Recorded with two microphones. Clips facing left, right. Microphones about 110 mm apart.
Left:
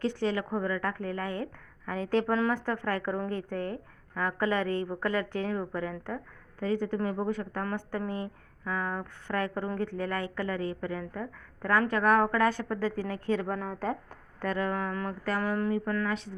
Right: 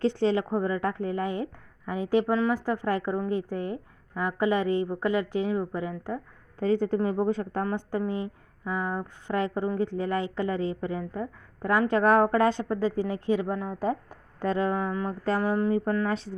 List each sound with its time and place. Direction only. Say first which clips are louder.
0.0 s a woman's voice: right 5 dB; 30° right (ahead or behind); by 6.1 s 10° right (ahead or behind)
6.6 s a woman's voice: right 5 dB; 30° right (ahead or behind)
11.9 s a woman's voice: right 5 dB; 25° right (ahead or behind); by 14.4 s 10° right (ahead or behind)
14.4 s a woman's voice: right 4 dB; 25° right (ahead or behind)